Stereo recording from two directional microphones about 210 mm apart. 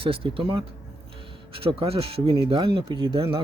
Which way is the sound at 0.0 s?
25° right (ahead or behind).